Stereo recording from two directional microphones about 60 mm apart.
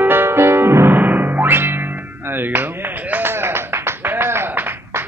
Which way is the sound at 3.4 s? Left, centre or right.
Right.